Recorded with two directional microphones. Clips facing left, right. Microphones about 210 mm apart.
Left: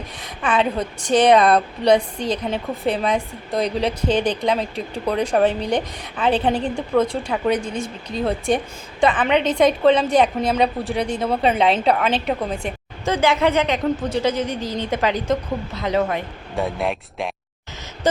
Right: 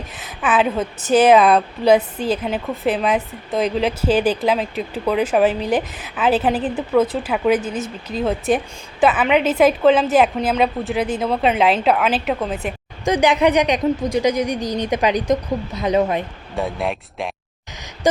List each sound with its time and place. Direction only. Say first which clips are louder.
0.2 s a woman's voice: right 2 dB; 5° right (ahead or behind)
13.1 s a woman's voice: right 3 dB; 15° right (ahead or behind)
16.6 s a woman's voice: even; centre (ahead or behind)
18.0 s a sound: right 2 dB; 15° right (ahead or behind)